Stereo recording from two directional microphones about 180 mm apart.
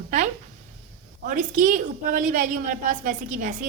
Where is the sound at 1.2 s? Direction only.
45° right (ahead or behind).